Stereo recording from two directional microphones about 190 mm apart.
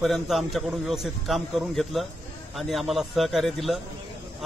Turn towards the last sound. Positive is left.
turn(degrees=0)  # may be behind; listen again after turning